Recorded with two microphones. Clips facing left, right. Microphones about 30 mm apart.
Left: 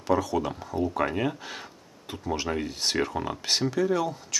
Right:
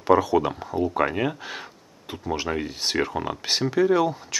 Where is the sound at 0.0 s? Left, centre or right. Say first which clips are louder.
Right 6 dB; centre.